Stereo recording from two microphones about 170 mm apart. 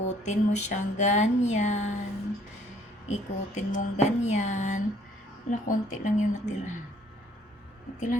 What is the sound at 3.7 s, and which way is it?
A woman's voice, 40° left (ahead or behind).